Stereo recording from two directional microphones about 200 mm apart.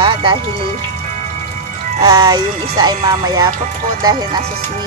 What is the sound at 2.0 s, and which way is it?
Speech, 20° right (ahead or behind).